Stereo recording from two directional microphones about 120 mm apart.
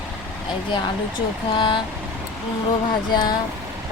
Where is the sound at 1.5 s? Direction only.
45° left (ahead or behind).